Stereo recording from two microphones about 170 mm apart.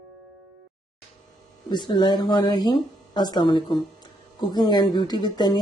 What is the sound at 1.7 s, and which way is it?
Speech, 25° left (ahead or behind).